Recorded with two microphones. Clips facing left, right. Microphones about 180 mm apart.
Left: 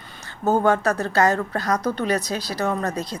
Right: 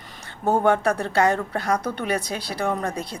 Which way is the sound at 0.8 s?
10° right (ahead or behind).